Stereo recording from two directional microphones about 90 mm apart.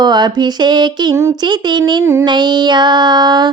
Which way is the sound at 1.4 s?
55° right (ahead or behind).